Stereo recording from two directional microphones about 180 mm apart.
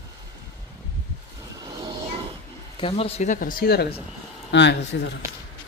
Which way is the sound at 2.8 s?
30° left (ahead or behind).